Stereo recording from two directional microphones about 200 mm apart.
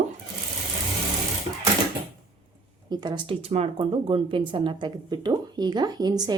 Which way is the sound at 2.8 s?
20° right (ahead or behind).